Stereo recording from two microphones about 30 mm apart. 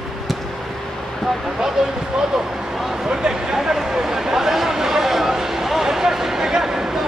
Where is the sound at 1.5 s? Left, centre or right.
Centre.